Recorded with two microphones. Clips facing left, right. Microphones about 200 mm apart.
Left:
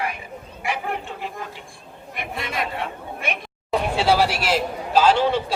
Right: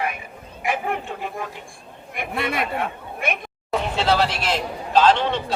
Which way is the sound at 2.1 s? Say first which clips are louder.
Right 3 dB; 60° right (ahead or behind).